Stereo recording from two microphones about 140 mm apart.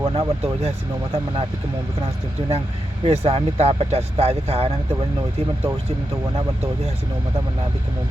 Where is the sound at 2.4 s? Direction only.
35° right (ahead or behind).